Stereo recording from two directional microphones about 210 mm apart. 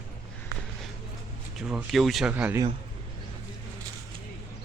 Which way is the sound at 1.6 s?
Centre (ahead or behind).